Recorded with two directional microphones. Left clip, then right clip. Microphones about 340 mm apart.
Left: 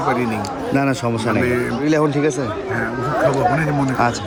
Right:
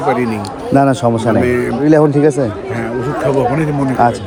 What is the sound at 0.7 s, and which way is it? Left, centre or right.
A man's voice, centre.